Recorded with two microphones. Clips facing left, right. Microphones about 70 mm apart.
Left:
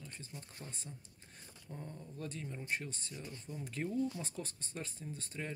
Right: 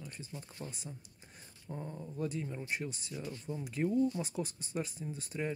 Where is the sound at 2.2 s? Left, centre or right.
Centre.